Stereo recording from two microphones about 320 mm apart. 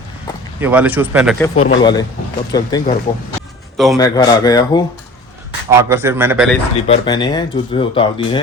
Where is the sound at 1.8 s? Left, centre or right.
Centre.